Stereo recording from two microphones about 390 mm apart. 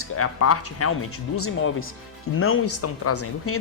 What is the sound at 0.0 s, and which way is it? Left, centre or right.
Speech, left.